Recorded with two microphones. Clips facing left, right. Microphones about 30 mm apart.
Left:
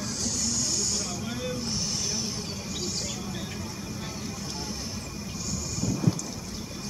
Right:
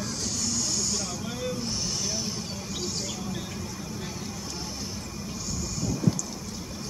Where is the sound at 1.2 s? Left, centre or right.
Centre.